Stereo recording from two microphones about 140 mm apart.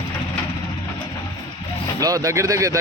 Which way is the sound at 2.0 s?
25° right (ahead or behind).